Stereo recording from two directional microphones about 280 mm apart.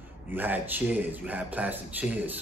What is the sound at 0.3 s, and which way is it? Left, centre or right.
A man's voice, centre.